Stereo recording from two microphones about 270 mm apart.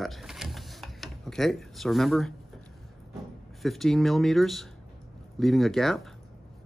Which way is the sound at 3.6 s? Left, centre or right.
Centre.